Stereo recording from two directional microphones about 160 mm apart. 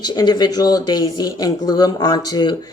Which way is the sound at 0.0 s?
25° left (ahead or behind).